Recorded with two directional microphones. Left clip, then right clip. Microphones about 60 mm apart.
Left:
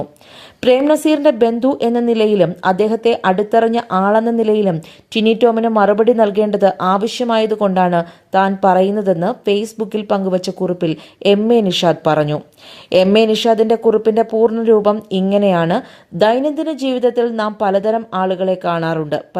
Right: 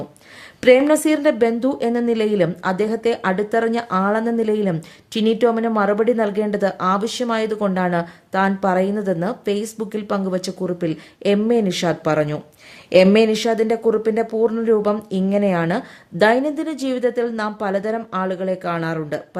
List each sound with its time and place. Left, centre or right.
0.9 s a woman's voice: left
10.7 s speech: left
13.1 s a woman's voice: left
15.6 s a woman's voice: left
18.9 s speech: left